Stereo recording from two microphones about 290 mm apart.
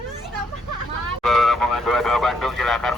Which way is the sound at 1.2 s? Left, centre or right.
Centre.